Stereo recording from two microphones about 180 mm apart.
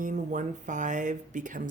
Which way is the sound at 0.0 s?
45° right (ahead or behind).